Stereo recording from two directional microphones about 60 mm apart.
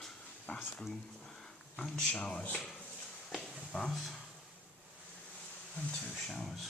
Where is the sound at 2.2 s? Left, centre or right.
Left.